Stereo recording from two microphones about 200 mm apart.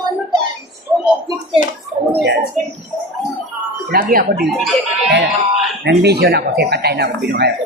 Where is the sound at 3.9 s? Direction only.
45° right (ahead or behind).